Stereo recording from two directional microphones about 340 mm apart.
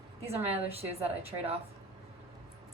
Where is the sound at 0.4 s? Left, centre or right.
Centre.